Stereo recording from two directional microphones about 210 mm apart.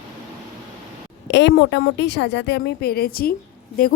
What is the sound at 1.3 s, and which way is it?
A woman's voice, 60° left (ahead or behind).